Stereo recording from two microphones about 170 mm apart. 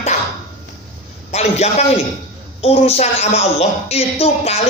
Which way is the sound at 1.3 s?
40° left (ahead or behind).